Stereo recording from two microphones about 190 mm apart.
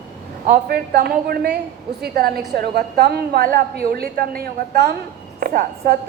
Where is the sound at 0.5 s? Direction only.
55° right (ahead or behind).